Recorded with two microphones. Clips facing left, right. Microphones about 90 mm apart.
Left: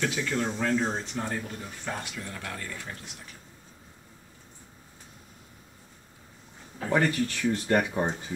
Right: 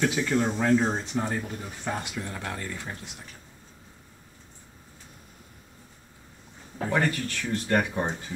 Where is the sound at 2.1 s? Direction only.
25° right (ahead or behind).